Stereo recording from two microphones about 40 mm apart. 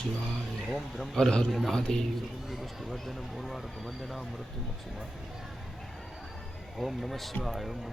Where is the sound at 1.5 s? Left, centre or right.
Centre.